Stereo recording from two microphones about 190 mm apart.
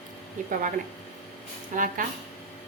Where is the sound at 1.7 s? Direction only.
45° right (ahead or behind).